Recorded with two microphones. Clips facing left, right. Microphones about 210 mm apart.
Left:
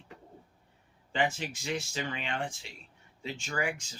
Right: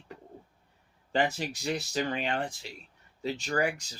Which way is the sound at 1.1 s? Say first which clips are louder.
Right 3 dB; 40° right (ahead or behind).